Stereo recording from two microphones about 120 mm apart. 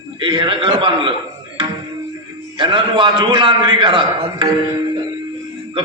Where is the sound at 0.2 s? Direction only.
45° right (ahead or behind).